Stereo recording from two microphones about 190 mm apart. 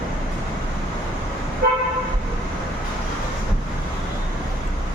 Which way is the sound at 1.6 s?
50° right (ahead or behind).